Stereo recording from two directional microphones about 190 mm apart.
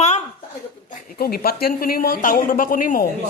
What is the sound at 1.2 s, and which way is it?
A woman's voice, 55° left (ahead or behind).